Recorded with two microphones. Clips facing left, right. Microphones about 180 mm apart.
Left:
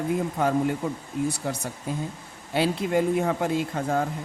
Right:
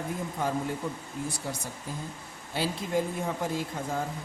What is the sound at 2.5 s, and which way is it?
Speech, 65° left (ahead or behind).